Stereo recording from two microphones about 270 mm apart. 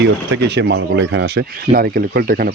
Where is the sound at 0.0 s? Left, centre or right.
Right.